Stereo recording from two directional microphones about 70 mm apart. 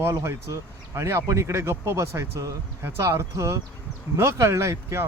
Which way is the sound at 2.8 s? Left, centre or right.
Right.